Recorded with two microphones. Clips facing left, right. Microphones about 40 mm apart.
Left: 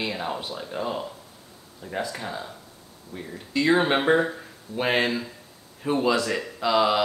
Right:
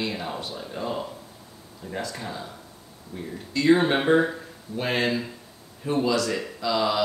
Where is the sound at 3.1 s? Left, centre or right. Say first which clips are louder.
Left 1 dB; left.